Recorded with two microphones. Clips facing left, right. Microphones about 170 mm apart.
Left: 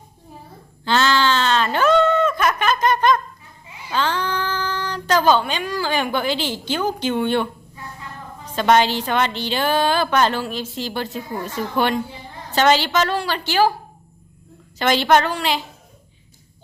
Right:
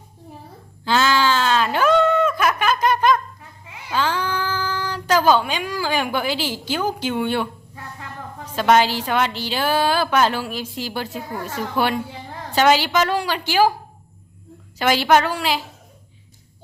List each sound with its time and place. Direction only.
0.9 s a sound: 5° right (ahead or behind)
3.9 s child singing: 10° right (ahead or behind)
8.4 s a woman's voice: 5° right (ahead or behind)
14.8 s a woman's voice: 5° right (ahead or behind)